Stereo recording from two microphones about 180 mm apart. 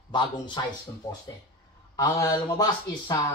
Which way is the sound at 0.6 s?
25° left (ahead or behind).